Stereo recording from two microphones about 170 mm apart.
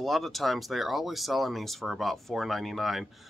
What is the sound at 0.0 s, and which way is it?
Speech, centre (ahead or behind).